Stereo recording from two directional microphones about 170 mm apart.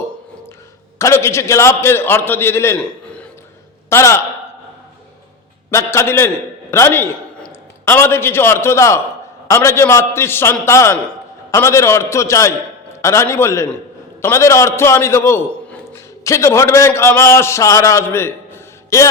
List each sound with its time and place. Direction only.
0.9 s a man's voice: 15° left (ahead or behind)
3.8 s a man's voice: 15° left (ahead or behind)
5.7 s a man's voice: 15° left (ahead or behind)